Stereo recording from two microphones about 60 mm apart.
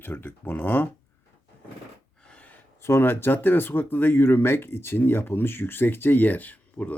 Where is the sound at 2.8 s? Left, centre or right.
Left.